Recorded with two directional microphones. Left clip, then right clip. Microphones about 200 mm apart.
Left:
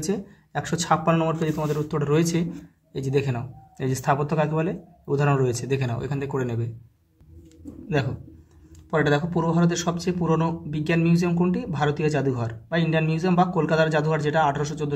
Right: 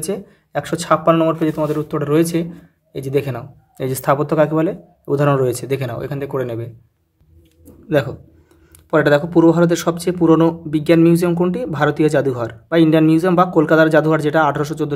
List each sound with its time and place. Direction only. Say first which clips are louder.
0.0 s speech: right 4 dB; 25° right (ahead or behind)
8.9 s speech: right 9 dB; 45° right (ahead or behind)